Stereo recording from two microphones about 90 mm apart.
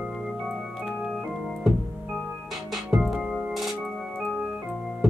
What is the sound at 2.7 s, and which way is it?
Music, 5° right (ahead or behind).